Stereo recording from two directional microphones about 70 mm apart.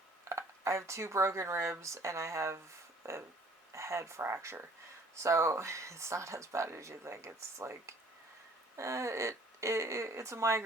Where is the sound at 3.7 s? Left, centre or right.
Right.